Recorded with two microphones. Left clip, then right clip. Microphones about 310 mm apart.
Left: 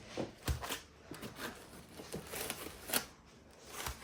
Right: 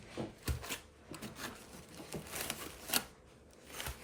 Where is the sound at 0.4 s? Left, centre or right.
Centre.